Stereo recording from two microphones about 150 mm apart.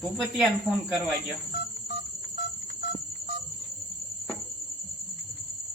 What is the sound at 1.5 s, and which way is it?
Telephone dialing, 90° left.